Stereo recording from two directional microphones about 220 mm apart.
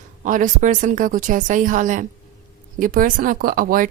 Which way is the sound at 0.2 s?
35° right (ahead or behind).